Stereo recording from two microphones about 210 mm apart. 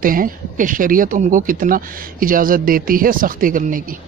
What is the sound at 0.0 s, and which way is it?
Speech, 40° right (ahead or behind).